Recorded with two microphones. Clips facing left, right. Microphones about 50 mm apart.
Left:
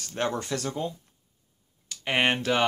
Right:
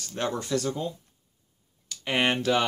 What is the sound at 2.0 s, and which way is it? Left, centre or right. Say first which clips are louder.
Speech: even; left.